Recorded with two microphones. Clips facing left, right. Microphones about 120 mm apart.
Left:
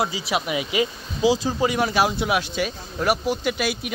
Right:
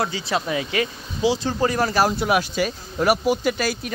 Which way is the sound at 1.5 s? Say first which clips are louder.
Right 1 dB; 5° left (ahead or behind).